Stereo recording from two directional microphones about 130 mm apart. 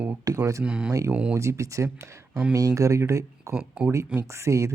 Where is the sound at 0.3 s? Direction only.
25° right (ahead or behind).